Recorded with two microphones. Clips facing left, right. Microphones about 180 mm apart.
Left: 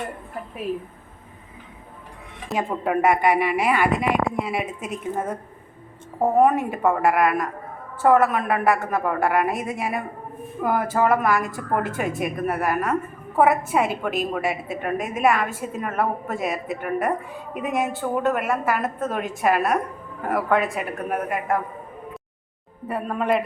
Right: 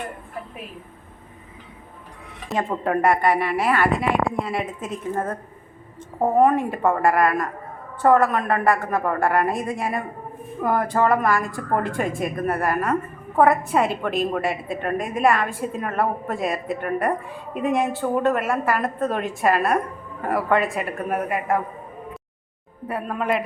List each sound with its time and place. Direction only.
2.5 s a woman's voice: centre (ahead or behind)
22.9 s a woman's voice: centre (ahead or behind)